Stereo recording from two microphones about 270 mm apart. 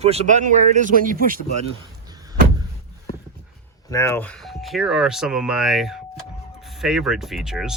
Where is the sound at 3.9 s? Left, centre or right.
Centre.